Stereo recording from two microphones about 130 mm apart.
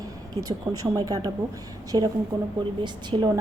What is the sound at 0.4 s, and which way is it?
A woman's voice, 30° right (ahead or behind).